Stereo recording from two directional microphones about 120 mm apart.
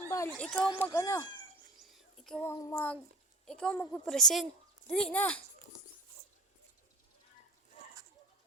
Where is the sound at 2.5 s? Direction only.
25° left (ahead or behind).